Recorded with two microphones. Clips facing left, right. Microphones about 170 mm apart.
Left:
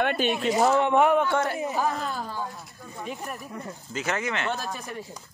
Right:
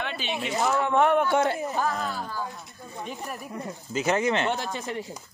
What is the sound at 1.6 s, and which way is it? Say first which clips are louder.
Speech: left 1 dB; centre (ahead or behind).